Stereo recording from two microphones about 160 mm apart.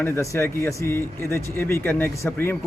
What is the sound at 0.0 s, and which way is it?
Speech, 15° left (ahead or behind).